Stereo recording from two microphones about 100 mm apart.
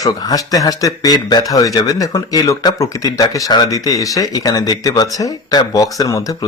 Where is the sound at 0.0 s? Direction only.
35° left (ahead or behind).